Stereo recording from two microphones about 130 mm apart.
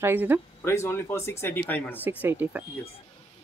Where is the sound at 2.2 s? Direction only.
15° right (ahead or behind).